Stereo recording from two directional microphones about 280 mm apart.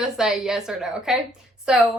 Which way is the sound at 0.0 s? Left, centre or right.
Centre.